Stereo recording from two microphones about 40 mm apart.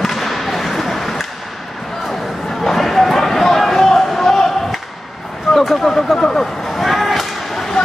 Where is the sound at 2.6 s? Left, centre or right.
Centre.